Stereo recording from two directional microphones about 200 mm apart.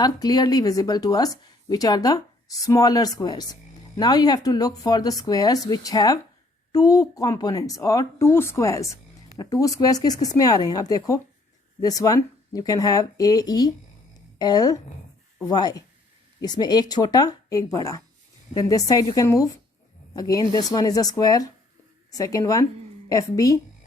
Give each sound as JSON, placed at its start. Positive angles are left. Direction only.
{"t": 0.0, "sound": "speech", "side_deg": 20}